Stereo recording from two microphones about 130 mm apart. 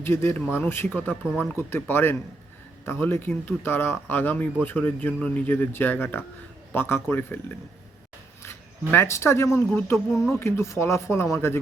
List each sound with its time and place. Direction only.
0.0 s speech: 20° left (ahead or behind)
1.2 s speech: 5° right (ahead or behind)
1.5 s speech: 15° left (ahead or behind)
8.9 s speech: 20° left (ahead or behind)